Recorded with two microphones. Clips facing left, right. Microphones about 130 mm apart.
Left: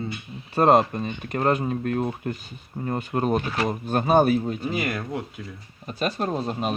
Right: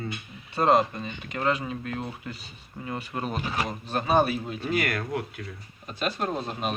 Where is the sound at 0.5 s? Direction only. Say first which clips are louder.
Left 4 dB; 45° left (ahead or behind).